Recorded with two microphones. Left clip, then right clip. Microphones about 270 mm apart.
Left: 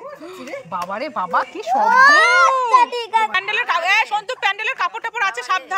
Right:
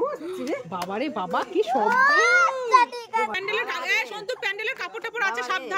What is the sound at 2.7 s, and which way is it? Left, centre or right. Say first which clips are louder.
Speech: left 5 dB; left.